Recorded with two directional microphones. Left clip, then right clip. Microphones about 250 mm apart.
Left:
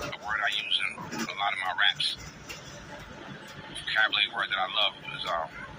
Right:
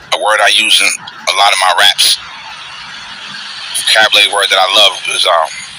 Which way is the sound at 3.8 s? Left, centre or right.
Right.